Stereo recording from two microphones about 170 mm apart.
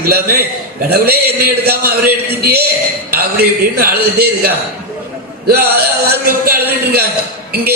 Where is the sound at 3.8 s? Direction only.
65° right (ahead or behind).